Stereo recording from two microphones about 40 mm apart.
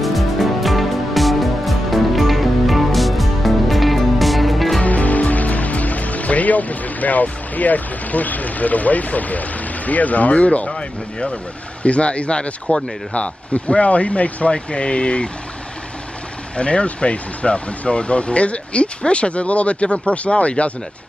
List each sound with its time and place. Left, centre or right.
0.0 s music: centre
4.8 s speech: left
16.5 s speech: left